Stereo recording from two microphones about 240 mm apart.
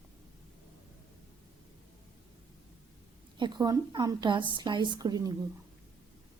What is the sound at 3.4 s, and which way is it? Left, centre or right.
A woman's voice, centre.